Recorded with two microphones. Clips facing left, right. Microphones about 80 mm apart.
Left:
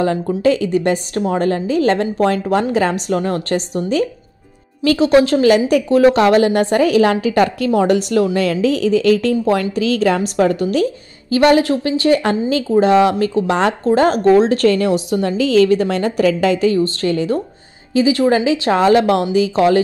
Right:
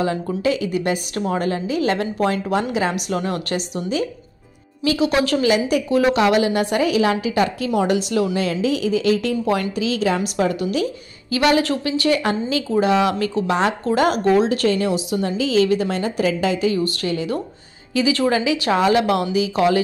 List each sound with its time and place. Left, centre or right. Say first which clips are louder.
0.0 s a woman's voice: left 5 dB; left
5.4 s a woman's voice: left 6 dB; left
13.8 s a woman's voice: left 6 dB; left
16.7 s a woman's voice: left 5 dB; left
17.9 s speech: left 5 dB; left
18.3 s a woman's voice: left 4 dB; left